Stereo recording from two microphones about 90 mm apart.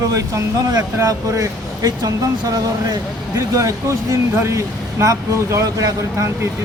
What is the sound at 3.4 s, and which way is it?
Speech, 35° right (ahead or behind).